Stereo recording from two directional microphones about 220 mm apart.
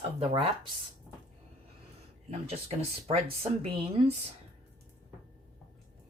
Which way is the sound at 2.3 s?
25° right (ahead or behind).